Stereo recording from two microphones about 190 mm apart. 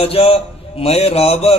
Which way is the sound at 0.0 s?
30° left (ahead or behind).